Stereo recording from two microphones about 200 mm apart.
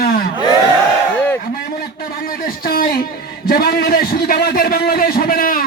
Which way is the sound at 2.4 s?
45° left (ahead or behind).